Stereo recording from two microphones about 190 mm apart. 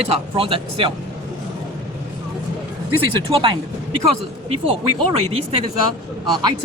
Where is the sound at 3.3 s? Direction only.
30° right (ahead or behind).